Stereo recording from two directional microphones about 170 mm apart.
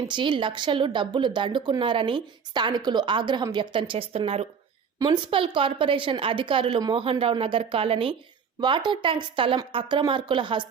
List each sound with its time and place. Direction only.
0.0 s speech: 30° right (ahead or behind)